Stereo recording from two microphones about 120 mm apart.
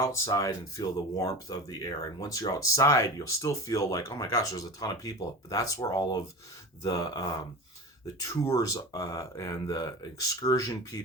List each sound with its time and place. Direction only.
0.0 s speech: 25° left (ahead or behind)
5.8 s speech: 40° left (ahead or behind)